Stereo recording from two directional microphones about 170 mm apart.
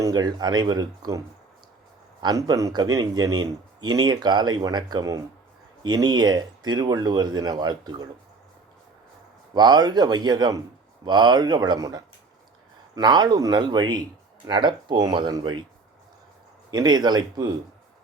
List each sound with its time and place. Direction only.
0.0 s speech: 20° right (ahead or behind)
2.2 s speech: 20° right (ahead or behind)
9.6 s speech: 25° right (ahead or behind)
16.7 s speech: 25° right (ahead or behind)